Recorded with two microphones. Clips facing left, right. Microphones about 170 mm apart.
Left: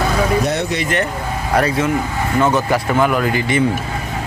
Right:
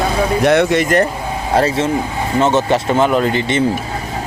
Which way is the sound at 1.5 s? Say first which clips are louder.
Right 2 dB; 30° right (ahead or behind).